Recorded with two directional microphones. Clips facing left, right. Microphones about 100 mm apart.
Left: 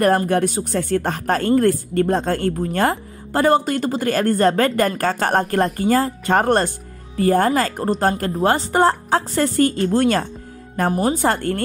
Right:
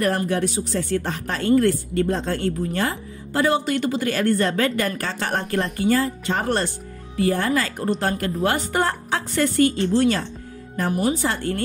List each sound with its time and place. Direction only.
0.3 s speech: 50° left (ahead or behind)
10.9 s speech: 35° left (ahead or behind)
11.2 s speech: 50° left (ahead or behind)